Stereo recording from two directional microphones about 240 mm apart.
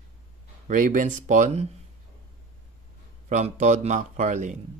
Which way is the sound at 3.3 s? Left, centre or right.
Right.